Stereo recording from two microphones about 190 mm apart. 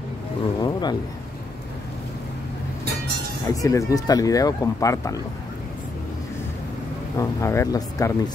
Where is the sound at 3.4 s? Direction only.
15° left (ahead or behind).